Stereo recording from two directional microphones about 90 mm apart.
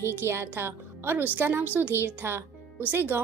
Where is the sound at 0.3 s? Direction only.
25° right (ahead or behind).